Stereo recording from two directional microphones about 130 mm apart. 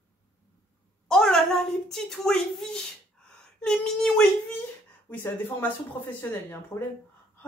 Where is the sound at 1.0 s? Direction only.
5° left (ahead or behind).